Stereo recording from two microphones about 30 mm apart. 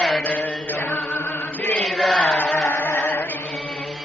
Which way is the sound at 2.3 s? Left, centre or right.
Left.